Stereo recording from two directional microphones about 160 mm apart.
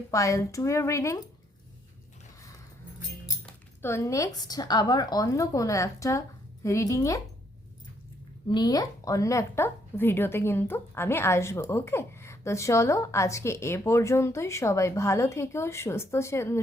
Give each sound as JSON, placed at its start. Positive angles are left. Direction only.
{"t": 0.1, "sound": "a woman's voice", "side_deg": 20}
{"t": 3.8, "sound": "a woman's voice", "side_deg": 15}
{"t": 8.4, "sound": "a woman's voice", "side_deg": 25}